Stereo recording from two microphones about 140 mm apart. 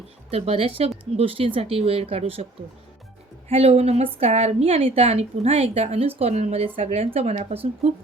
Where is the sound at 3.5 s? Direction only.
45° right (ahead or behind).